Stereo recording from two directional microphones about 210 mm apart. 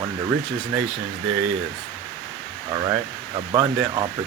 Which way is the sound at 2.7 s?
20° right (ahead or behind).